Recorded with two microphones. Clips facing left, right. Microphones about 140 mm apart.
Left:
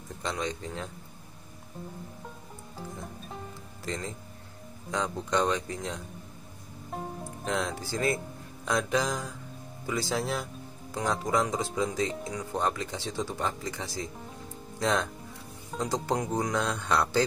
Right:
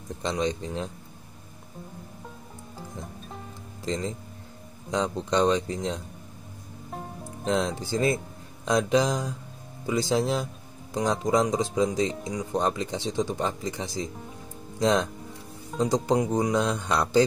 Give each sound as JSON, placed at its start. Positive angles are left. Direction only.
{"t": 0.2, "sound": "speech", "side_deg": -20}
{"t": 3.8, "sound": "speech", "side_deg": -20}
{"t": 7.4, "sound": "speech", "side_deg": -20}